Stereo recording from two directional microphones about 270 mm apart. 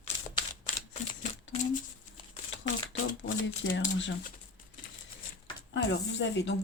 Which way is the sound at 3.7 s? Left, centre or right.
Left.